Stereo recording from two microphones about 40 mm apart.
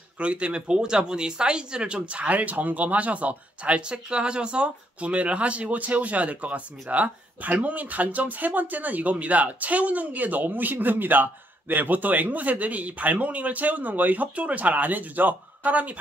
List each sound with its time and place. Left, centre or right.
0.2 s speech: right